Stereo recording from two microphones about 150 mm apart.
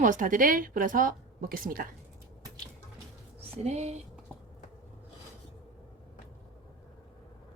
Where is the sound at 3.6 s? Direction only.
45° right (ahead or behind).